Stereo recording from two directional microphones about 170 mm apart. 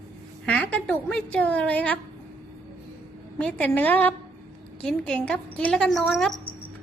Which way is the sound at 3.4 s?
10° left (ahead or behind).